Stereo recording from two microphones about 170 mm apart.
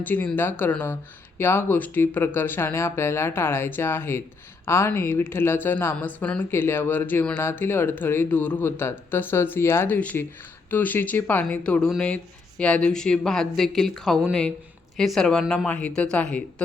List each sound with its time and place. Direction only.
0.0 s speech: 10° left (ahead or behind)